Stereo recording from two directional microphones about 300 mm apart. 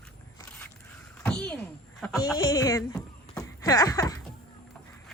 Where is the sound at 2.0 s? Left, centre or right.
Centre.